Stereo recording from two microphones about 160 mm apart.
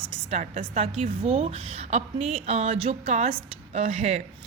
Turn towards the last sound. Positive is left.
turn(degrees=-45)  # may be behind; listen again after turning